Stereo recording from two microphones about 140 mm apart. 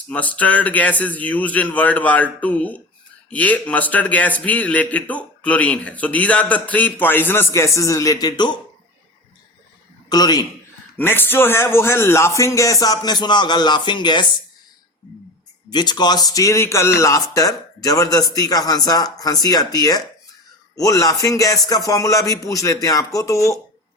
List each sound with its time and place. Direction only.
0.1 s a man's voice: 10° left (ahead or behind); by 8.5 s 30° left (ahead or behind)
10.1 s speech: 30° left (ahead or behind)
10.9 s speech: 15° left (ahead or behind); by 14.3 s 35° left (ahead or behind)
15.7 s speech: 30° left (ahead or behind)